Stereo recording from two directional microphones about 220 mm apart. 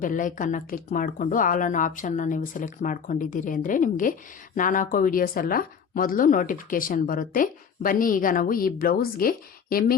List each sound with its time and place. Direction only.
0.0 s speech: 35° left (ahead or behind)